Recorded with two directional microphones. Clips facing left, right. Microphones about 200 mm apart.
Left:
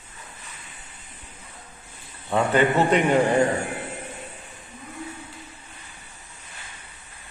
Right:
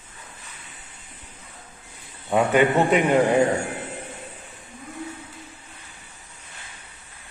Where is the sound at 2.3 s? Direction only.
15° right (ahead or behind).